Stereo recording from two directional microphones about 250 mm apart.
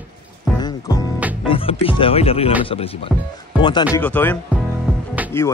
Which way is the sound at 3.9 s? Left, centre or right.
Centre.